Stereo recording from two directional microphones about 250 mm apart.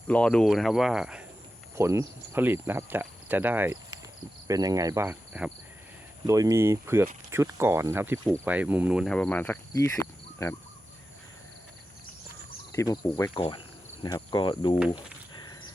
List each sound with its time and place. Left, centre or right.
0.1 s cricket: centre
8.3 s speech: centre
12.7 s speech: centre